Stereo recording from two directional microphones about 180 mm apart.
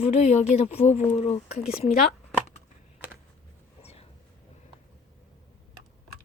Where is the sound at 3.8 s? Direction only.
35° left (ahead or behind).